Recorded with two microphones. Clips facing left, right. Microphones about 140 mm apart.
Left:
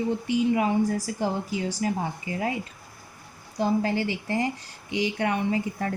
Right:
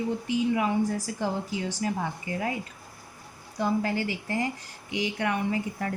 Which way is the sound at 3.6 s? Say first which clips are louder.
Left 2 dB; 25° left (ahead or behind).